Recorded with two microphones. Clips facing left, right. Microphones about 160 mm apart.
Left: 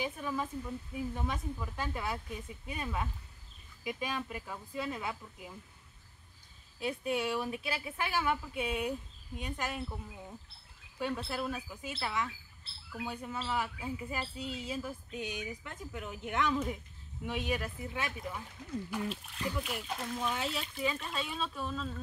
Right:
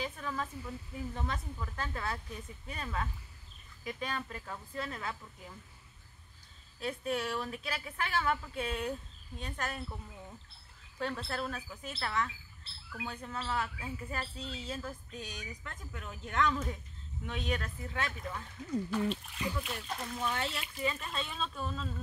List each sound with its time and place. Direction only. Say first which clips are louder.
0.0 s speech: left 2 dB; 15° left (ahead or behind)
6.8 s speech: left 1 dB; 15° left (ahead or behind)
11.0 s speech: left 1 dB; 10° left (ahead or behind)
19.0 s speech: right 2 dB; centre (ahead or behind)